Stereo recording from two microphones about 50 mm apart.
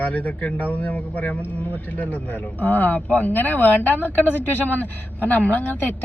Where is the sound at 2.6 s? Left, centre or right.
Left.